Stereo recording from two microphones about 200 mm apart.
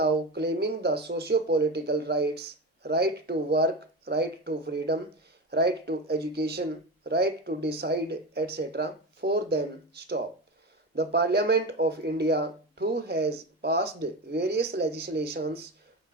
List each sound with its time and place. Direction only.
0.0 s speech: 55° right (ahead or behind)